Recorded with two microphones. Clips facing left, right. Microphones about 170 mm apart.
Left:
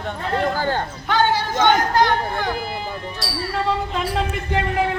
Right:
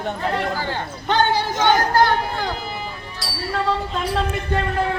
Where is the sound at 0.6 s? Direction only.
45° left (ahead or behind).